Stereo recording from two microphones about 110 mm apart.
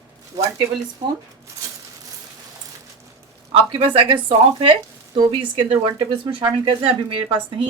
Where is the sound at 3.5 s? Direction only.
55° right (ahead or behind).